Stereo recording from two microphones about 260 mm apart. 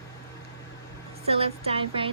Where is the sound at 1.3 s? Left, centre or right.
Right.